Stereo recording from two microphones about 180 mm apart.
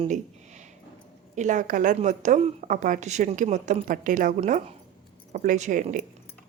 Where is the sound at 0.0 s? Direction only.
40° right (ahead or behind).